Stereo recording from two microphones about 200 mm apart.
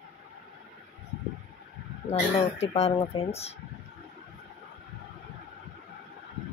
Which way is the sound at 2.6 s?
30° left (ahead or behind).